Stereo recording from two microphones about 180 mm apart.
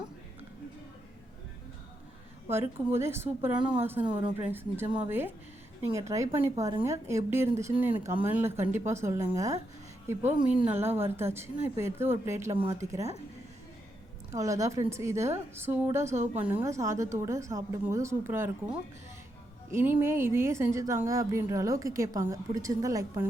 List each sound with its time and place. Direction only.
2.5 s speech: 15° right (ahead or behind)
10.7 s speech: 15° right (ahead or behind)
14.3 s speech: 20° right (ahead or behind)